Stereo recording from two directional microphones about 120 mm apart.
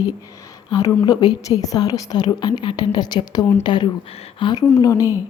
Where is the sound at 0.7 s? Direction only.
30° left (ahead or behind).